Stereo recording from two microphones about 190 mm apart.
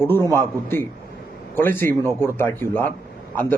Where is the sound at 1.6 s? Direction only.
10° left (ahead or behind).